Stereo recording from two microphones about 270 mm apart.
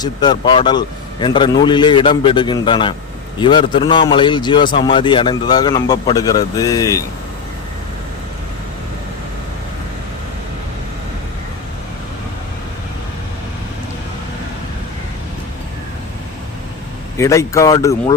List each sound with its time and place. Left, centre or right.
0.0 s a man's voice: centre
17.2 s a man's voice: centre